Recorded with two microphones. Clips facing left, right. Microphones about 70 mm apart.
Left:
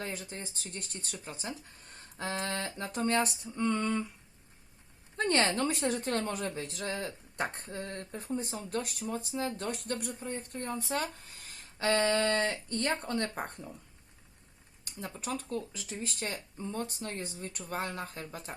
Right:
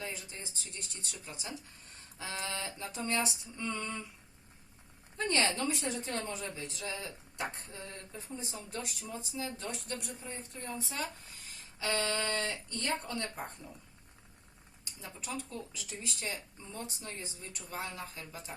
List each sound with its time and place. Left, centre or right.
0.0 s a woman's voice: left
5.1 s a woman's voice: left
13.2 s speech: left
15.0 s a woman's voice: left